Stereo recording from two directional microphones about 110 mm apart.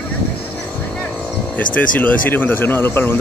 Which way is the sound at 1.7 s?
15° left (ahead or behind).